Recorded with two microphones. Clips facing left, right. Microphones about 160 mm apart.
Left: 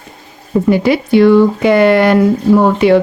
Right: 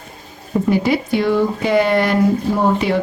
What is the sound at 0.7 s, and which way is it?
Speech, 75° left (ahead or behind).